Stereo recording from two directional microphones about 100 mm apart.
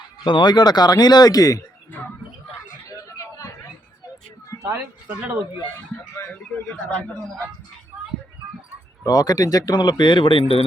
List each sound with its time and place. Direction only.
0.3 s speech: 50° left (ahead or behind)
3.2 s a sound: 30° left (ahead or behind)
4.7 s speech: 20° right (ahead or behind)
6.5 s speech: 15° left (ahead or behind)
9.0 s speech: 40° left (ahead or behind); by 10.6 s 60° left (ahead or behind)